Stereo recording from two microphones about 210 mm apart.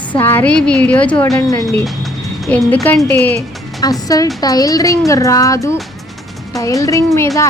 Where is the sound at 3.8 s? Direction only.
20° left (ahead or behind).